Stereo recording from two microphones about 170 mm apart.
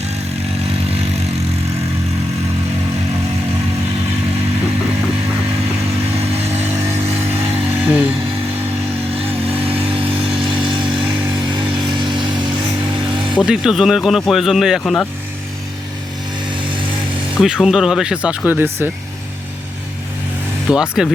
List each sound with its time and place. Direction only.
6.1 s vehicle: 40° right (ahead or behind)
7.9 s music: 5° right (ahead or behind)
9.0 s vehicle: 35° right (ahead or behind)
9.5 s vehicle: 10° right (ahead or behind)
9.9 s a sound: 30° right (ahead or behind)
11.9 s vehicle: 25° right (ahead or behind)
13.3 s speech: 5° right (ahead or behind)
17.3 s speech: 5° right (ahead or behind)
20.7 s speech: 5° right (ahead or behind)